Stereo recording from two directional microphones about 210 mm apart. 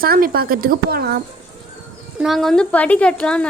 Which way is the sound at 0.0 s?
45° right (ahead or behind).